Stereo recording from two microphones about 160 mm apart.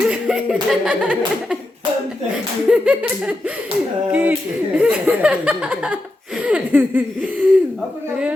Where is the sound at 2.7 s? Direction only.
5° right (ahead or behind).